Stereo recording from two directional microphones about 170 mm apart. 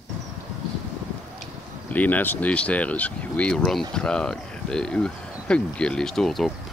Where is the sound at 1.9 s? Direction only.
10° left (ahead or behind).